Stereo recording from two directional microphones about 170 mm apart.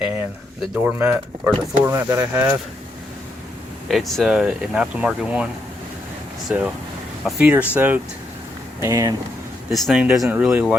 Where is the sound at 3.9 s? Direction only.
Centre (ahead or behind); by 9.2 s 20° right (ahead or behind).